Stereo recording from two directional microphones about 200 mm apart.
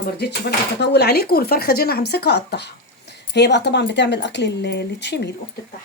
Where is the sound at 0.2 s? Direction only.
55° left (ahead or behind).